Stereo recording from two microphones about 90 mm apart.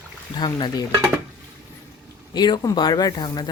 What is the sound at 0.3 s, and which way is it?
Speech, 55° left (ahead or behind).